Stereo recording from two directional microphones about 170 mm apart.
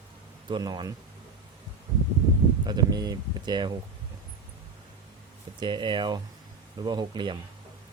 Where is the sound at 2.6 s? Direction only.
25° right (ahead or behind).